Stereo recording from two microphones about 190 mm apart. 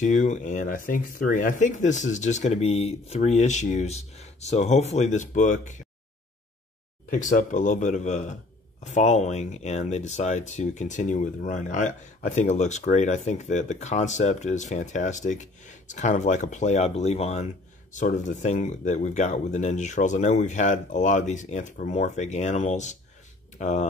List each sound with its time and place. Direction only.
0.0 s speech: 40° left (ahead or behind)
7.1 s speech: 40° left (ahead or behind)